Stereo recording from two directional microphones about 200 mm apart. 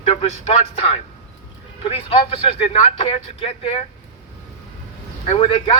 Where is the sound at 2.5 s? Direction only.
30° left (ahead or behind).